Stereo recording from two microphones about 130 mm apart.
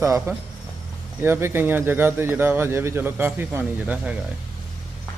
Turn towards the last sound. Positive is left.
turn(degrees=-10)  # may be behind; listen again after turning